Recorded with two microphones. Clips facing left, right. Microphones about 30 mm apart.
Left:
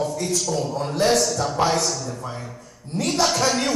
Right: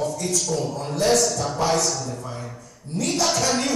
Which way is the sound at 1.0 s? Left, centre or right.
Centre.